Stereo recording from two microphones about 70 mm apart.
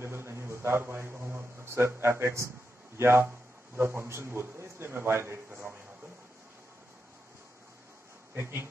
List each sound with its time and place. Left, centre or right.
0.0 s a sound: right
3.0 s a man's voice: right
5.5 s speech: centre
8.4 s speech: right